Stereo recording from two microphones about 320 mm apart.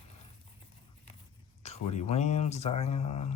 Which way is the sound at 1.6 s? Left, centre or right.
Centre.